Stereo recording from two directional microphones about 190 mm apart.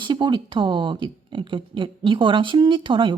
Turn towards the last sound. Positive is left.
turn(degrees=-25)  # may be behind; listen again after turning